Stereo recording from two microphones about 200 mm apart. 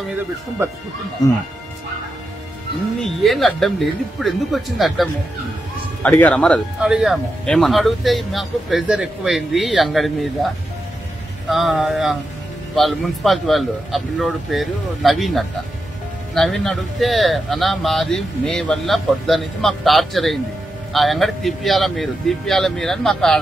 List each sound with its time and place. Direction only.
1.2 s speech: 20° left (ahead or behind)
3.0 s speech: centre (ahead or behind)